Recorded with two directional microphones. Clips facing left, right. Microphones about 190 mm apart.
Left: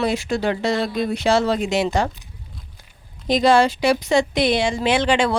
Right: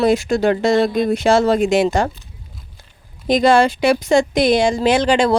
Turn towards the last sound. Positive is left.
turn(degrees=-40)  # may be behind; listen again after turning